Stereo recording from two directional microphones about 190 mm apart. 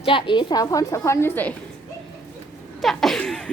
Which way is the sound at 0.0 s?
25° left (ahead or behind).